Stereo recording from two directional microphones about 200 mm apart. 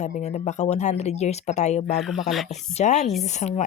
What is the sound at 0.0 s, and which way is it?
Speech, 35° left (ahead or behind).